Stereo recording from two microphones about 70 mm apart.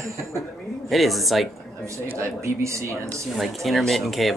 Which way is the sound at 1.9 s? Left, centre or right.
Right.